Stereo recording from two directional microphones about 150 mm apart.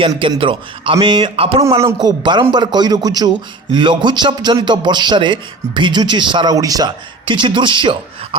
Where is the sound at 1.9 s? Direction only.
25° right (ahead or behind).